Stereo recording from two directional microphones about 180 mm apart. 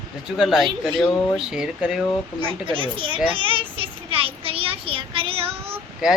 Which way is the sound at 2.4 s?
30° right (ahead or behind).